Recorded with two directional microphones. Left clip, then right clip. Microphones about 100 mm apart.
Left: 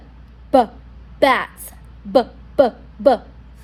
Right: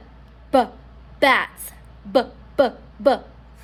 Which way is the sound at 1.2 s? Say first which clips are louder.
Left 1 dB; 15° left (ahead or behind).